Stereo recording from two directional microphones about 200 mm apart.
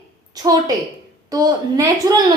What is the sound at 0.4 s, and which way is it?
A woman's voice, 20° right (ahead or behind).